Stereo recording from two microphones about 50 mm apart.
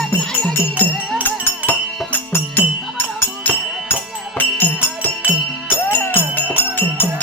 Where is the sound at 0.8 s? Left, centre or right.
Left.